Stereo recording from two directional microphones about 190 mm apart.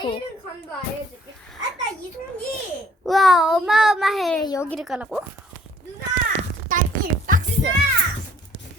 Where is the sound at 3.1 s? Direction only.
Centre (ahead or behind).